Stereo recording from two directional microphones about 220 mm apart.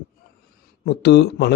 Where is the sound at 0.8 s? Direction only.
50° left (ahead or behind).